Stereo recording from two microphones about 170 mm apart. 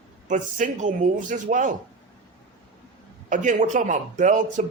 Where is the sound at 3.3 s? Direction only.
45° right (ahead or behind).